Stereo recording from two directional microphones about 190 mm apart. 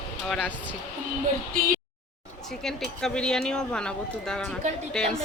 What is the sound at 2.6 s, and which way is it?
Speech, centre (ahead or behind).